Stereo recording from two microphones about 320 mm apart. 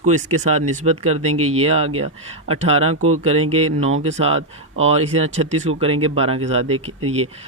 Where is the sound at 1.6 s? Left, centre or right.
Centre.